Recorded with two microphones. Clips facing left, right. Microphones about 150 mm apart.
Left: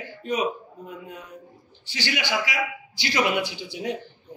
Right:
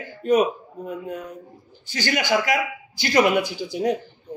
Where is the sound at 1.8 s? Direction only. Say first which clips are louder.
Right 5 dB; 45° right (ahead or behind).